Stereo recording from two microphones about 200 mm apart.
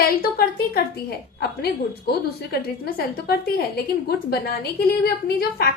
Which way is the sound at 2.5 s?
50° left (ahead or behind).